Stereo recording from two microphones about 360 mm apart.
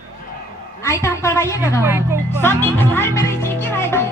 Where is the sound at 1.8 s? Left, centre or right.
Centre.